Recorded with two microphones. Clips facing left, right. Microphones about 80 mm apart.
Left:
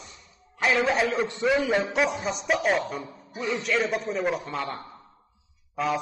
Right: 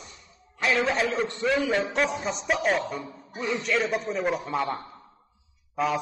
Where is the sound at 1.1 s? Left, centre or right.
Centre.